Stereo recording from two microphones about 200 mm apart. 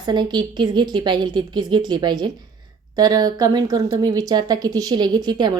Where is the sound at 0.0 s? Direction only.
20° right (ahead or behind).